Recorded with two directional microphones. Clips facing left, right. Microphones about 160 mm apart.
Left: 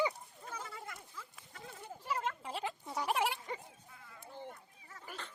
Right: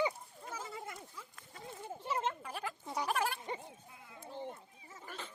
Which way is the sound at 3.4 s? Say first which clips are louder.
Right 2 dB; 20° right (ahead or behind).